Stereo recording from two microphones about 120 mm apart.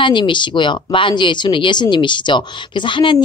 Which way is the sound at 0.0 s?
40° left (ahead or behind).